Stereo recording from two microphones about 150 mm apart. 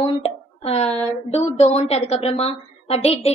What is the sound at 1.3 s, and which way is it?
A woman's voice, 45° left (ahead or behind).